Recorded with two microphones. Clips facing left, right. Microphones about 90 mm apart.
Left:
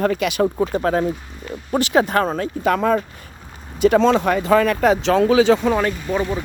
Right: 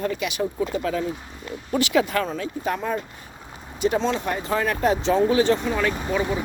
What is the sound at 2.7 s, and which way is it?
Speech, 80° left.